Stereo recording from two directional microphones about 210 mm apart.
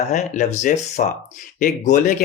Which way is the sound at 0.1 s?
35° left (ahead or behind).